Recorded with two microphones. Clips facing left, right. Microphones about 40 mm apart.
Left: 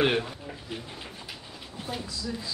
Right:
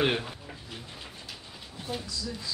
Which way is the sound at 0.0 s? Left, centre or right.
Centre.